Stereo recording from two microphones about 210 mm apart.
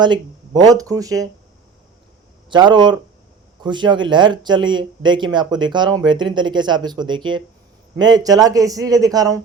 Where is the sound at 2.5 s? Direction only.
20° right (ahead or behind).